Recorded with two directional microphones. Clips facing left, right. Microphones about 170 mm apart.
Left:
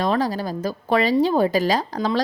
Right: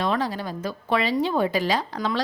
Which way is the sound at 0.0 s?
40° left (ahead or behind).